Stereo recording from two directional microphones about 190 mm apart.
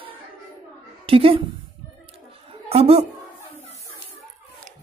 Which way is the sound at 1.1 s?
30° right (ahead or behind).